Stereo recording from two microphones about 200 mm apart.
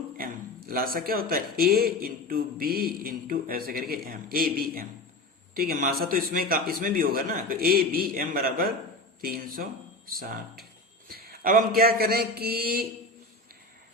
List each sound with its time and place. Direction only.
0.2 s a man's voice: 45° right (ahead or behind)